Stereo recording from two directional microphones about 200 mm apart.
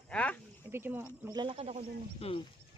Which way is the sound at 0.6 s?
10° right (ahead or behind).